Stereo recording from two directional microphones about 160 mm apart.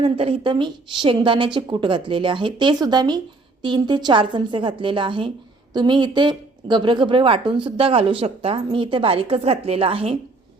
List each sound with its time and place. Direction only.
0.0 s a woman's voice: 35° right (ahead or behind)